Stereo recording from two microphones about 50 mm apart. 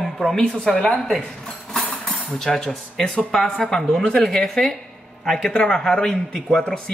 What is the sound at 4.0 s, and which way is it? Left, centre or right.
Speech, left.